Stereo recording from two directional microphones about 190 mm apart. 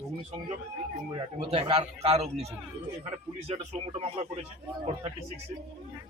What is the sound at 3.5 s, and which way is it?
Speech, 30° right (ahead or behind).